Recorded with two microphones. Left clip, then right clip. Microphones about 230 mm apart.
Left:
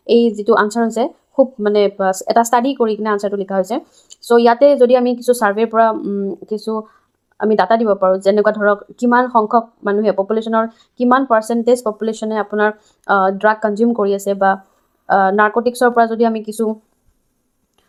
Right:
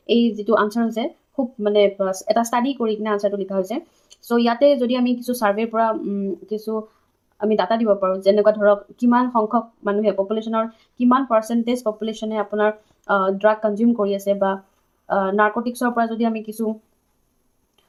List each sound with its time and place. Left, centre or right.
0.0 s a woman's voice: left